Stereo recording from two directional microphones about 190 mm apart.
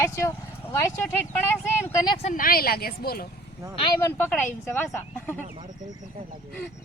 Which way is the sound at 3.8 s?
20° left (ahead or behind).